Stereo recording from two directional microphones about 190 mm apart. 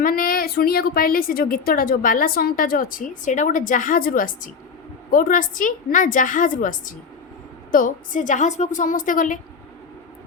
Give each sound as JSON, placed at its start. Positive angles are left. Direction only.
{"t": 0.0, "sound": "a woman's voice", "side_deg": 45}